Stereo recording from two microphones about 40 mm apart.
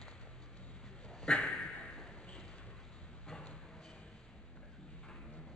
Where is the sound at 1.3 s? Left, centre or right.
Left.